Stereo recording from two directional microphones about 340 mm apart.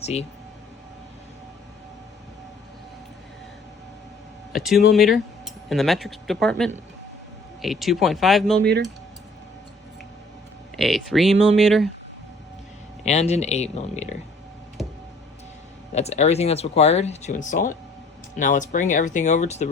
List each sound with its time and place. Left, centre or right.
0.0 s speech: centre
4.5 s speech: centre
8.6 s speech: right
10.8 s speech: centre
13.1 s speech: centre
15.9 s speech: centre